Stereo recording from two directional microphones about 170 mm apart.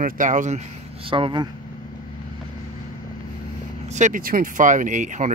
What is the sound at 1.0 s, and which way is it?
Speech, 30° right (ahead or behind).